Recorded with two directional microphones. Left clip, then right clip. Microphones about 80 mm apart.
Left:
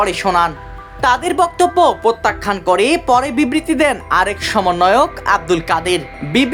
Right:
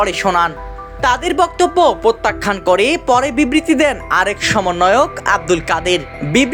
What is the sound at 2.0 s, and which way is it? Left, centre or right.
Music, right.